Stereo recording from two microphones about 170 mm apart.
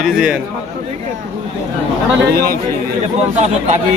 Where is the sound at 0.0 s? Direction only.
5° right (ahead or behind).